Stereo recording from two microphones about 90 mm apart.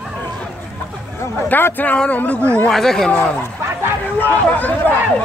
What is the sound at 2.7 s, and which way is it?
Speech, 5° left (ahead or behind).